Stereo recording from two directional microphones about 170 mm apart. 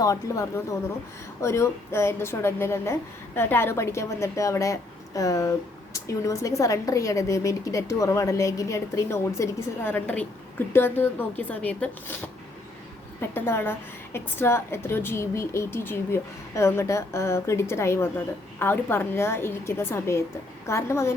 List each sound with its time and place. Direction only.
0.0 s a woman's voice: 20° left (ahead or behind)
13.3 s a woman's voice: 10° left (ahead or behind)